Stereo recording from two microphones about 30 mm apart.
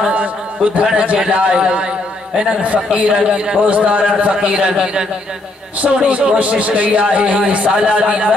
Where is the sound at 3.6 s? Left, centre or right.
Right.